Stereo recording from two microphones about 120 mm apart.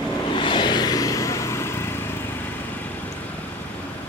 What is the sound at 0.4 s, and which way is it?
Vehicle, 40° left (ahead or behind).